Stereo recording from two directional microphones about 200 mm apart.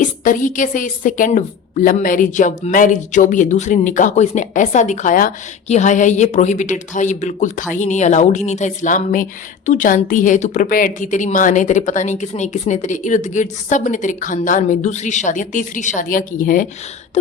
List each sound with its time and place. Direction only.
0.3 s a woman's voice: 40° left (ahead or behind)